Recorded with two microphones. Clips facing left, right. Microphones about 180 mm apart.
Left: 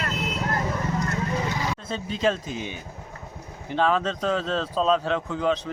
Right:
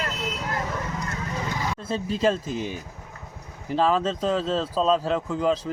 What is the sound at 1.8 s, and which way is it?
Speech, 5° right (ahead or behind).